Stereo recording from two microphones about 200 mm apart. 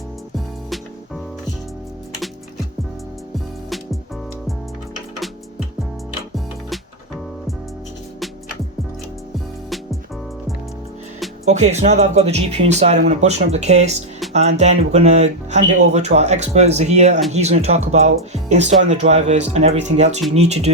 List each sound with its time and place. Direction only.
0.3 s music: centre (ahead or behind)
9.6 s music: centre (ahead or behind)
11.4 s speech: 35° right (ahead or behind)